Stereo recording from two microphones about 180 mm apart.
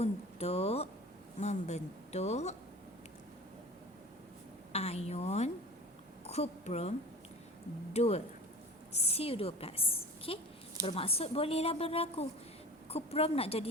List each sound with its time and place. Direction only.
0.0 s a sound: 35° left (ahead or behind)
1.4 s a woman's voice: 40° left (ahead or behind)
4.7 s a woman's voice: 35° left (ahead or behind)
7.9 s a woman's voice: 35° left (ahead or behind)